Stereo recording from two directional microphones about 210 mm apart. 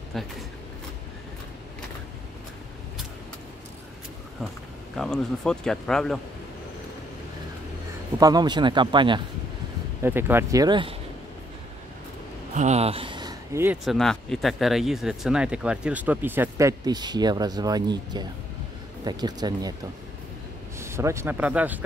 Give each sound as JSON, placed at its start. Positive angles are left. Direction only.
{"t": 0.1, "sound": "speech", "side_deg": 0}
{"t": 4.9, "sound": "speech", "side_deg": 0}
{"t": 8.2, "sound": "speech", "side_deg": -20}
{"t": 10.0, "sound": "speech", "side_deg": -10}
{"t": 12.5, "sound": "speech", "side_deg": -30}
{"t": 13.8, "sound": "speech", "side_deg": 0}
{"t": 20.8, "sound": "speech", "side_deg": -15}